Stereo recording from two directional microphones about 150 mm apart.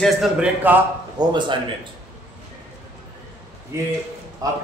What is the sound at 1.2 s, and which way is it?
Speech, 30° right (ahead or behind).